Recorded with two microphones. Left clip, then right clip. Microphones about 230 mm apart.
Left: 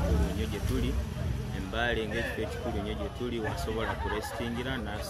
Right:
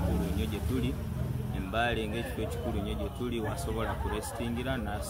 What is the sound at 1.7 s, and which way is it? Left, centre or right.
Speech, centre.